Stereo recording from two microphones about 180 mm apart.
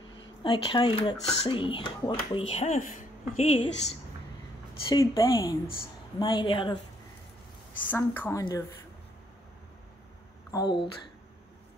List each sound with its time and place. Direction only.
0.4 s speech: 25° left (ahead or behind); by 2.9 s 40° left (ahead or behind)
3.3 s a woman's voice: 30° left (ahead or behind)
4.8 s speech: 20° left (ahead or behind)
7.8 s speech: 10° left (ahead or behind)
10.5 s speech: 25° left (ahead or behind)